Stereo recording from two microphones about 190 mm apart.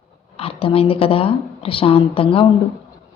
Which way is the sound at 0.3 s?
30° left (ahead or behind).